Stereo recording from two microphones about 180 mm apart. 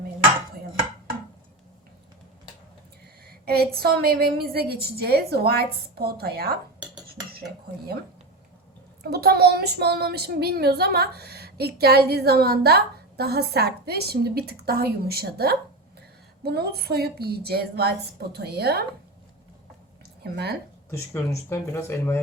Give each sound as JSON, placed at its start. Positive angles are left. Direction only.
{"t": 3.2, "sound": "speech", "side_deg": -60}
{"t": 9.0, "sound": "speech", "side_deg": -60}
{"t": 20.2, "sound": "speech", "side_deg": -60}
{"t": 20.9, "sound": "speech", "side_deg": 15}